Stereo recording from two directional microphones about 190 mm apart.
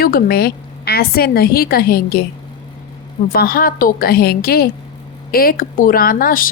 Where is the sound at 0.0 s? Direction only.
50° left (ahead or behind).